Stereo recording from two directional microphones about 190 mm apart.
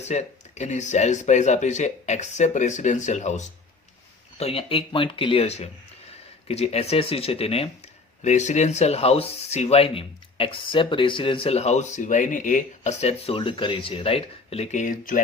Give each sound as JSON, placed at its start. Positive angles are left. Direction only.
{"t": 0.0, "sound": "speech", "side_deg": 35}